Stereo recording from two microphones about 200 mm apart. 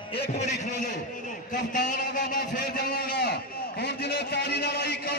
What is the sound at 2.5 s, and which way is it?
A man's voice, 50° left (ahead or behind).